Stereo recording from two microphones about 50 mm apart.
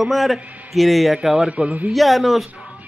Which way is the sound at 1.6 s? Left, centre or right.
Right.